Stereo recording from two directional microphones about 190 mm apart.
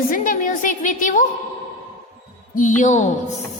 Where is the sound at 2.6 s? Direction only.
40° left (ahead or behind).